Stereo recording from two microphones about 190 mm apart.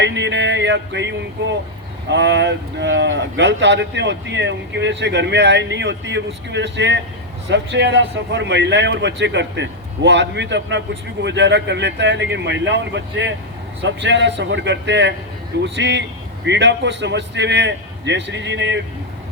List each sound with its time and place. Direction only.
0.0 s music: 65° right (ahead or behind)
2.0 s a man's voice: 70° right (ahead or behind)